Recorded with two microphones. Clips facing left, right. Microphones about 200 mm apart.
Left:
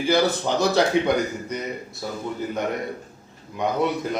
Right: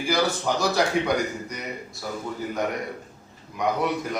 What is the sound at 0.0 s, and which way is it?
A man's voice, 25° left (ahead or behind).